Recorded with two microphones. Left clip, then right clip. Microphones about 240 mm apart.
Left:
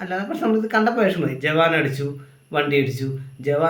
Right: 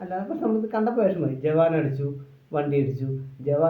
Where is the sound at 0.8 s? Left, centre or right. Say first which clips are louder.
Left 3 dB; left.